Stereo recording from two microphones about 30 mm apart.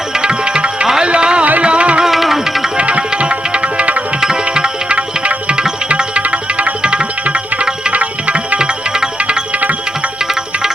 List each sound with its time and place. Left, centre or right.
0.1 s music: right
2.0 s music: centre
2.7 s music: right
4.2 s music: right
4.9 s music: right
6.8 s music: right
7.3 s music: right
7.9 s music: right
8.5 s music: right